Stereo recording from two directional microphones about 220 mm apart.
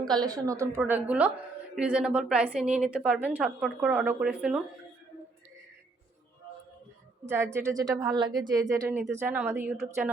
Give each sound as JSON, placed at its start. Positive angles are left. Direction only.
{"t": 0.0, "sound": "a woman's voice", "side_deg": -20}
{"t": 7.3, "sound": "a woman's voice", "side_deg": -10}